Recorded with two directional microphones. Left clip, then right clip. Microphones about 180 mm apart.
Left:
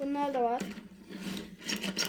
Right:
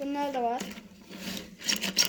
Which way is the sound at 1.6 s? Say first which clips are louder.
Right 7 dB; 15° right (ahead or behind).